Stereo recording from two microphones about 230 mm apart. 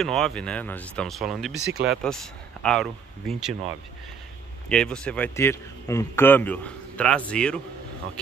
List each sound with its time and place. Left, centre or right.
0.0 s a man's voice: centre
4.6 s a man's voice: centre